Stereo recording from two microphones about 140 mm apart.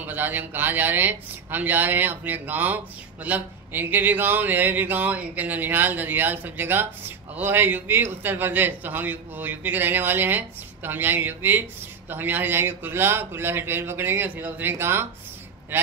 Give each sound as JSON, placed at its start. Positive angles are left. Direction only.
{"t": 0.0, "sound": "a man's voice", "side_deg": -15}